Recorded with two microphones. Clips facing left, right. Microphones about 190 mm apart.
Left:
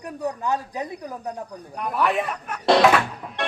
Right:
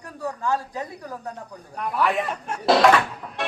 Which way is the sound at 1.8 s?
Centre (ahead or behind).